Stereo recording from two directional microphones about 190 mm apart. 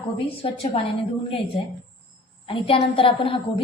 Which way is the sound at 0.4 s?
30° left (ahead or behind).